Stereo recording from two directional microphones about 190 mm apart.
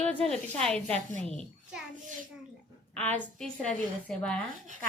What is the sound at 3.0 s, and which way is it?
A woman's voice, 5° left (ahead or behind).